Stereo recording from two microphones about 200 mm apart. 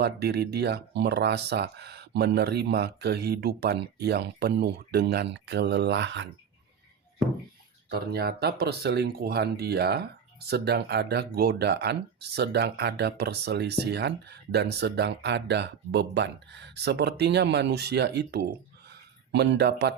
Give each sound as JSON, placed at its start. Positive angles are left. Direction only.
{"t": 0.0, "sound": "speech", "side_deg": -55}
{"t": 7.9, "sound": "speech", "side_deg": -50}
{"t": 18.9, "sound": "a sound", "side_deg": -60}